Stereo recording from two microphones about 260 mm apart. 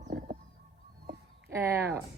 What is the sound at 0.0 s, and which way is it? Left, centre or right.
Bird, right.